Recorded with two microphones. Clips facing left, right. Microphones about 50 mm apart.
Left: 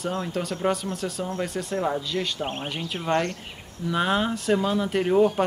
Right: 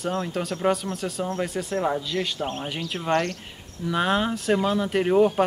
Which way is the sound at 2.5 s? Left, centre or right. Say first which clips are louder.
Right 1 dB; left.